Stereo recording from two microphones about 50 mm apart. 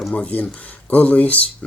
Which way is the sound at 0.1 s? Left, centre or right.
Left.